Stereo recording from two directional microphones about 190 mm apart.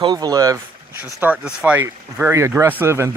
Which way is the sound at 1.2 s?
5° right (ahead or behind).